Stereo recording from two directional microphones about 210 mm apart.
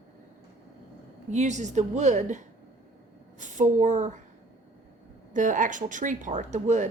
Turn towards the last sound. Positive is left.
turn(degrees=-35)  # may be behind; listen again after turning